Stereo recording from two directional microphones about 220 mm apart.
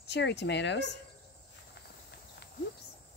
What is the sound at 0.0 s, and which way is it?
Speech, 50° left (ahead or behind).